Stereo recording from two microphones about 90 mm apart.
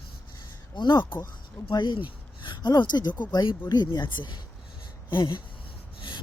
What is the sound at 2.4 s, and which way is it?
Speech, 55° left (ahead or behind).